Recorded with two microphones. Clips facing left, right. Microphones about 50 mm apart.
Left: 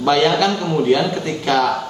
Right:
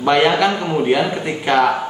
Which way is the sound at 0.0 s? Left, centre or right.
Right.